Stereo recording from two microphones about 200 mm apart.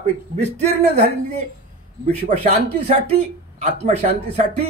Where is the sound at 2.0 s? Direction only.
30° right (ahead or behind).